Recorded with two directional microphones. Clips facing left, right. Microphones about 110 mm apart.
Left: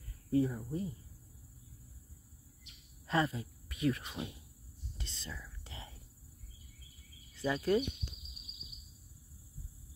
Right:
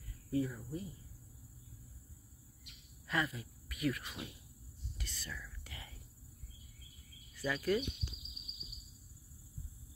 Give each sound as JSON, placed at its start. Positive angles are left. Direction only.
{"t": 0.3, "sound": "speech", "side_deg": 30}
{"t": 3.1, "sound": "speech", "side_deg": 30}
{"t": 4.9, "sound": "whispering", "side_deg": 25}
{"t": 7.3, "sound": "speech", "side_deg": 25}